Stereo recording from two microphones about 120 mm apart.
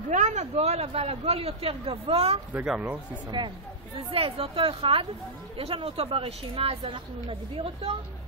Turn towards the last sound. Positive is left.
turn(degrees=-50)  # may be behind; listen again after turning